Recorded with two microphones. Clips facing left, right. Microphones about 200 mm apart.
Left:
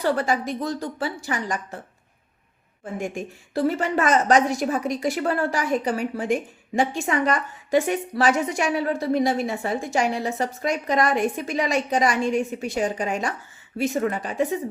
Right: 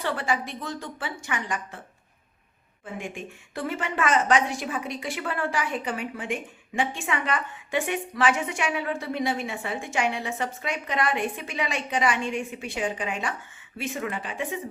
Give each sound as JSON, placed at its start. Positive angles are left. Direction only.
{"t": 0.0, "sound": "a woman's voice", "side_deg": 40}
{"t": 2.8, "sound": "a woman's voice", "side_deg": 40}